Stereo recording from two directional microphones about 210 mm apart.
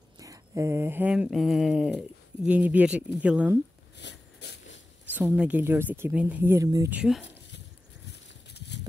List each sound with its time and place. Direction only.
0.2 s speech: 15° right (ahead or behind)
3.9 s rub: 55° left (ahead or behind)
5.0 s speech: 10° right (ahead or behind)
7.0 s speech: 5° right (ahead or behind)
8.1 s a sound: 55° left (ahead or behind)